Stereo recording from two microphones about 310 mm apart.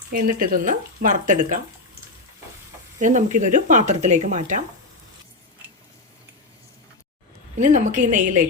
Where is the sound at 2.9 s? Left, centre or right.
Right.